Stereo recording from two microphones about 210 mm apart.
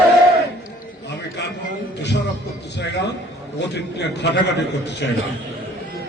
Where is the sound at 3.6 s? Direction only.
55° left (ahead or behind).